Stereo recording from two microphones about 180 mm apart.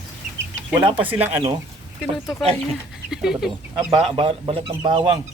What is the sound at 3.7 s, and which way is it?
A man's voice, 30° right (ahead or behind).